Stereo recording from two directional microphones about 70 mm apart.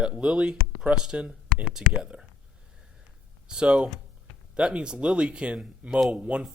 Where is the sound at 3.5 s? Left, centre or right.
Centre.